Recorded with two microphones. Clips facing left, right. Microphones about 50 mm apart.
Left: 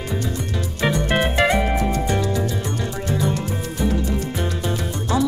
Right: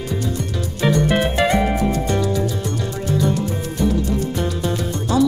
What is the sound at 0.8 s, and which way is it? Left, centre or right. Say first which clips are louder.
Music: right 3 dB; centre.